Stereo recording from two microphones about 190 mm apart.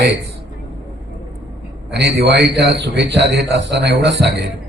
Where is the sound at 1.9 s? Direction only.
65° right (ahead or behind).